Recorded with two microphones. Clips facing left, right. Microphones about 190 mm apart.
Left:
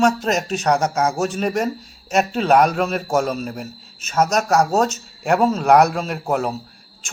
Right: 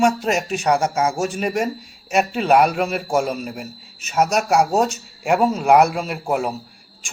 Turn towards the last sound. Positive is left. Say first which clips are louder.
# even
turn(degrees=-5)  # may be behind; listen again after turning